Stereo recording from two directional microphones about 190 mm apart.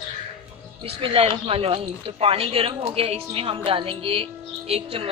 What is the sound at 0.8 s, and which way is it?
Speech, 25° right (ahead or behind).